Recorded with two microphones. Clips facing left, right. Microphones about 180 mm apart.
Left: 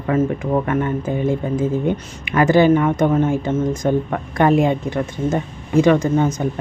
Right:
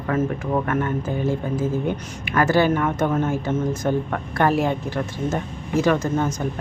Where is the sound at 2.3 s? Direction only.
15° left (ahead or behind).